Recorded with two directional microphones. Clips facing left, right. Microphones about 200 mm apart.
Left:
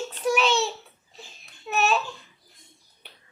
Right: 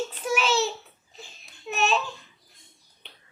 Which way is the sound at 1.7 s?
5° left (ahead or behind).